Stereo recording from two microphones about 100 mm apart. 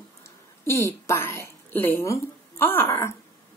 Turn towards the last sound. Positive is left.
turn(degrees=25)  # may be behind; listen again after turning